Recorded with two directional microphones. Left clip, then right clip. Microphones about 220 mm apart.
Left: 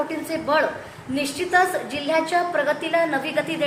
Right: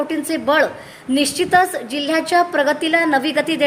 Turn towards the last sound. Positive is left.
turn(degrees=-45)  # may be behind; listen again after turning